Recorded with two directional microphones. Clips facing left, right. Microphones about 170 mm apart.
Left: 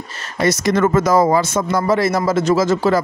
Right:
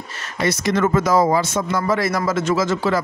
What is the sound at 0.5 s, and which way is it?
Speech, 45° left (ahead or behind).